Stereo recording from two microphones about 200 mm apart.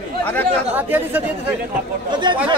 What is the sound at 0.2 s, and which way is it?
Speech, 10° left (ahead or behind).